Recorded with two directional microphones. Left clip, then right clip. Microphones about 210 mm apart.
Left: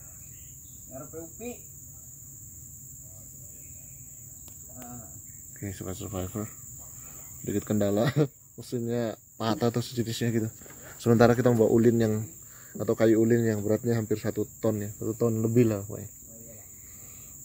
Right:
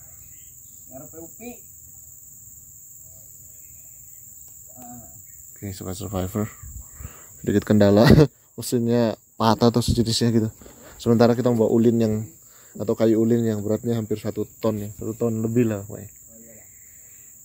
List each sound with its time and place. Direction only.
5.6 s speech: 20° right (ahead or behind); by 16.1 s centre (ahead or behind)